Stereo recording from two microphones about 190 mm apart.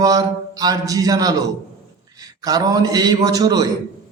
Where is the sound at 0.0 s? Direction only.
20° right (ahead or behind).